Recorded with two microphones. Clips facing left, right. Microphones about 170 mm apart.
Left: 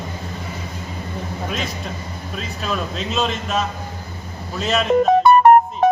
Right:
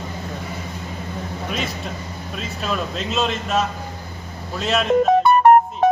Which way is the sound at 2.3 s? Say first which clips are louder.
Even; centre (ahead or behind).